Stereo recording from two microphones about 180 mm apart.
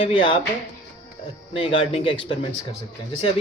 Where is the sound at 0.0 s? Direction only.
30° left (ahead or behind).